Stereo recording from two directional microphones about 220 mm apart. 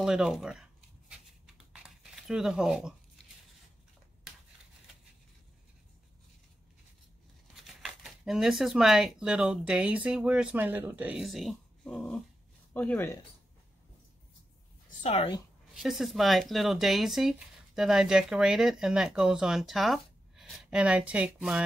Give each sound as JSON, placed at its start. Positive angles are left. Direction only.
{"t": 0.0, "sound": "a sound", "side_deg": 0}
{"t": 7.5, "sound": "speech", "side_deg": 0}
{"t": 15.0, "sound": "a woman's voice", "side_deg": 30}
{"t": 15.7, "sound": "speech", "side_deg": 0}